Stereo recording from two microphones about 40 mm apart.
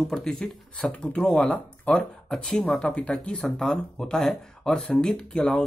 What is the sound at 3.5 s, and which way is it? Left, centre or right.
Speech, centre.